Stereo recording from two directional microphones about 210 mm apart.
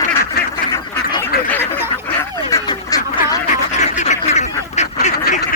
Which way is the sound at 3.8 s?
35° left (ahead or behind).